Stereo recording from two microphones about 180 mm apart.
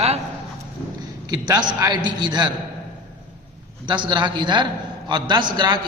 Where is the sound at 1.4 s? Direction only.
25° right (ahead or behind).